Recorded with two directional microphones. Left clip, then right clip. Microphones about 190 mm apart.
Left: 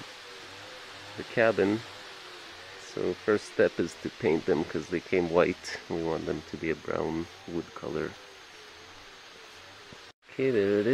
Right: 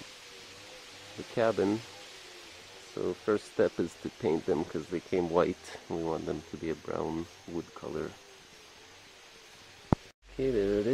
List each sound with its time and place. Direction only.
1.3 s speech: 5° right (ahead or behind)
2.9 s speech: 5° right (ahead or behind)
10.3 s speech: 5° right (ahead or behind)